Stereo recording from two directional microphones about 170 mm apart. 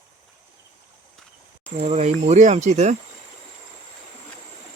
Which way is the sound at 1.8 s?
40° right (ahead or behind).